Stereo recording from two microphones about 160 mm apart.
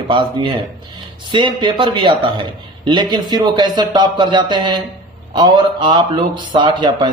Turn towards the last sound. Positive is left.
turn(degrees=-30)  # may be behind; listen again after turning